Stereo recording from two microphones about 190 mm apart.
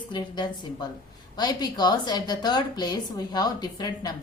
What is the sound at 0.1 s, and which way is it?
A woman's voice, 25° left (ahead or behind).